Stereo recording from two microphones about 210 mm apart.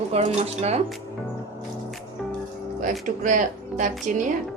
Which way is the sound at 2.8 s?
35° right (ahead or behind).